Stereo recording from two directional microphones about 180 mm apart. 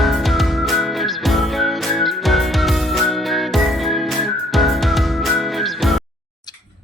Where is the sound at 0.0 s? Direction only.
Centre (ahead or behind).